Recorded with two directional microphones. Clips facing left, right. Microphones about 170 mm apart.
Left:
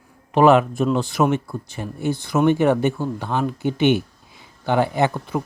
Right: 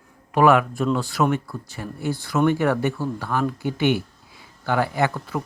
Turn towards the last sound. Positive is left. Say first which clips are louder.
# left 3 dB
turn(degrees=20)  # may be behind; listen again after turning